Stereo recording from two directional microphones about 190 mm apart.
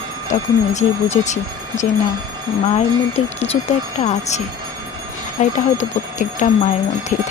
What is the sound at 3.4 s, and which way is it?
Speech, 30° left (ahead or behind).